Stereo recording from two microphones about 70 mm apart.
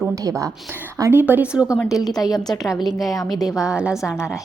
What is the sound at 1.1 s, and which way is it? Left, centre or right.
Speech, right.